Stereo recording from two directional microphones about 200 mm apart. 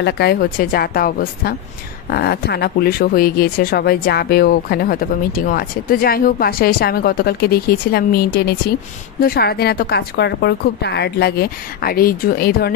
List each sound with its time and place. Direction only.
0.0 s speech: 55° left (ahead or behind)